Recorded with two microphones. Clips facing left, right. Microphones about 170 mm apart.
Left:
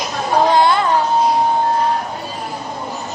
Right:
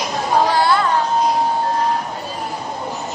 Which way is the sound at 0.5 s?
20° left (ahead or behind).